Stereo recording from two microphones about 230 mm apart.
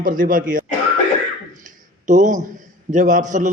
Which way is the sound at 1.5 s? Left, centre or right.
Right.